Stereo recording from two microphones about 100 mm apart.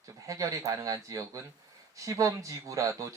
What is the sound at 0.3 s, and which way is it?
Speech, 35° right (ahead or behind).